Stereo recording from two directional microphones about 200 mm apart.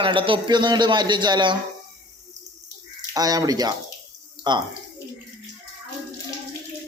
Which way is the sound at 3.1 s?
20° right (ahead or behind).